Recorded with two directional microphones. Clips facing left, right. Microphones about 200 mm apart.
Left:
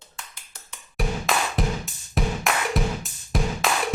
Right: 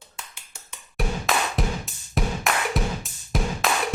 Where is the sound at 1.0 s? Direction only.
Centre (ahead or behind).